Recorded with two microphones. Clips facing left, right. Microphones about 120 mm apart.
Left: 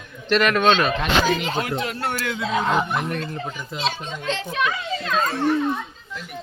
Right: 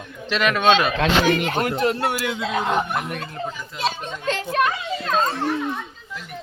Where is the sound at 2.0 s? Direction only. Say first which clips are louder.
Right 2 dB; 15° right (ahead or behind).